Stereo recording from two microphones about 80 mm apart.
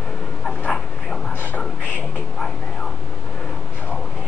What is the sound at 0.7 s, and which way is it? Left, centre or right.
Dog, centre.